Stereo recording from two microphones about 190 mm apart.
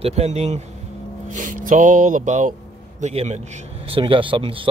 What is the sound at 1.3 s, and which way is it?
A man's voice, 45° right (ahead or behind).